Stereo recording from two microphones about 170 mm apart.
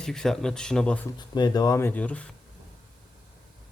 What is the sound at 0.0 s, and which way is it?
Speech, 5° left (ahead or behind).